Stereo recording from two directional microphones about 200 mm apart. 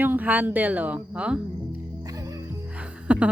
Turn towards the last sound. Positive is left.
turn(degrees=-5)  # may be behind; listen again after turning